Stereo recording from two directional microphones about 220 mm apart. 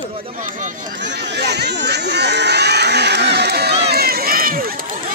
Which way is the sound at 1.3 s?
50° right (ahead or behind).